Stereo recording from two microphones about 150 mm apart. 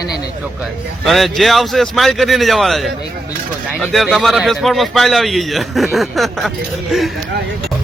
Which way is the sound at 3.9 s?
Centre (ahead or behind).